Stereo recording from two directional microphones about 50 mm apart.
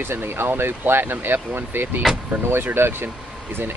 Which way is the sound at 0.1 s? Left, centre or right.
Right.